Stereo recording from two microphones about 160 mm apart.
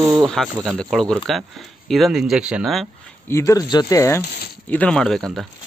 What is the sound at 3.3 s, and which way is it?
Speech, 20° left (ahead or behind).